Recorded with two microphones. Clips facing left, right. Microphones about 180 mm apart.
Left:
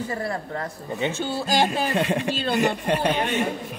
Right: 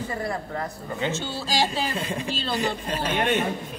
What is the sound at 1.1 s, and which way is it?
Speech, 55° left (ahead or behind).